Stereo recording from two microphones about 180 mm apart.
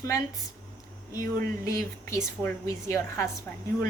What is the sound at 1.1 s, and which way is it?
Speech, 50° right (ahead or behind).